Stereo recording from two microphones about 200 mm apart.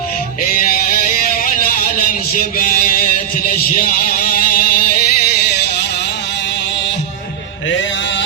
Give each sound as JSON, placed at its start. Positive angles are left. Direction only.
{"t": 0.6, "sound": "music", "side_deg": 45}